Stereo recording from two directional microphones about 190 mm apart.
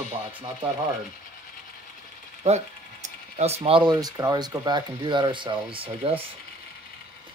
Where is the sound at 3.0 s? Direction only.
35° right (ahead or behind).